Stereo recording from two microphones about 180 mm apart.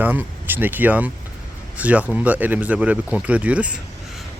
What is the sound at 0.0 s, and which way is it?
Speech, 10° right (ahead or behind).